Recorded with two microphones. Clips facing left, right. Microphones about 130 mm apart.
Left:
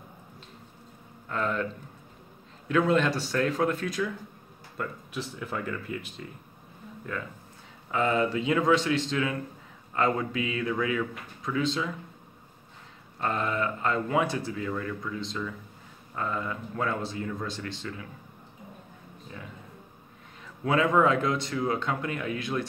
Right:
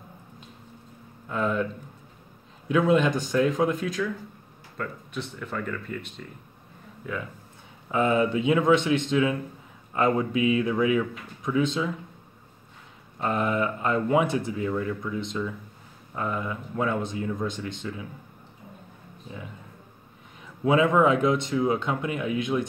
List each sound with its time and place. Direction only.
1.3 s speech: 10° right (ahead or behind)
2.7 s speech: 15° right (ahead or behind)
3.8 s speech: 5° left (ahead or behind)
7.0 s speech: 5° right (ahead or behind)
7.9 s speech: 20° right (ahead or behind)
13.2 s speech: 15° right (ahead or behind)
20.6 s speech: 20° right (ahead or behind)